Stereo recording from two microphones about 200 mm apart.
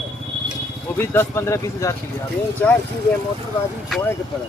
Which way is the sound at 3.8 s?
Centre (ahead or behind).